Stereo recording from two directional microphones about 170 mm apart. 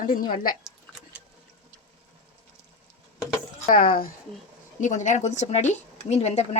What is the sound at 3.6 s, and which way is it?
Speech, 55° left (ahead or behind).